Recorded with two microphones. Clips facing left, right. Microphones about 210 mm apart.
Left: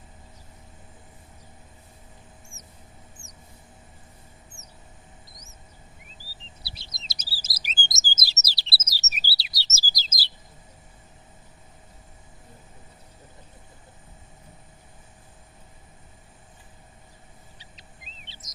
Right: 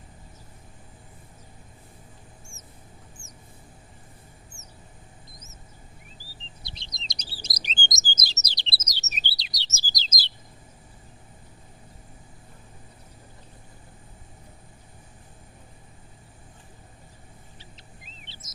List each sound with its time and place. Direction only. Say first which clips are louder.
4.6 s mouse: even; 20° left (ahead or behind)
6.7 s chirp: right 2 dB; 5° left (ahead or behind)
17.6 s bird: right 2 dB; 15° left (ahead or behind)